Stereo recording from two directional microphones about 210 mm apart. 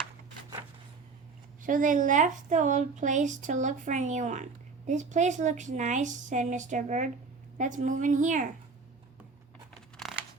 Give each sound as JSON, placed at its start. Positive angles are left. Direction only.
{"t": 1.6, "sound": "a woman's voice", "side_deg": -40}
{"t": 10.0, "sound": "crumpling", "side_deg": 0}